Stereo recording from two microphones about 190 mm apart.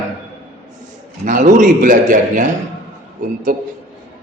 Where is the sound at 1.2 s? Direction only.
40° right (ahead or behind).